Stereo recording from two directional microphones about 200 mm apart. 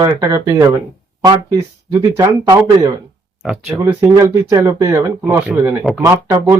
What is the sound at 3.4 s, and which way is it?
Speech, 5° right (ahead or behind).